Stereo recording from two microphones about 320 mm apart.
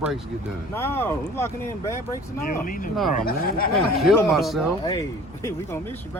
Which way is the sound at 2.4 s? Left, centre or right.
Left.